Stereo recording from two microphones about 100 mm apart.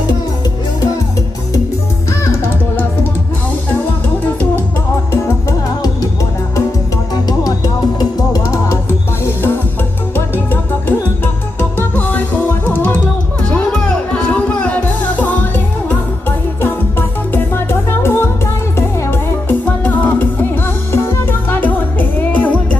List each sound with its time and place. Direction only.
5.5 s music: 35° left (ahead or behind)
7.3 s music: 40° left (ahead or behind); by 15.3 s 15° left (ahead or behind)
17.3 s music: 25° left (ahead or behind)
19.5 s music: 15° left (ahead or behind)